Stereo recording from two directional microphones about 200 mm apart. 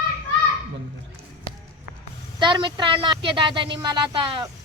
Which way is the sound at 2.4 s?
25° right (ahead or behind).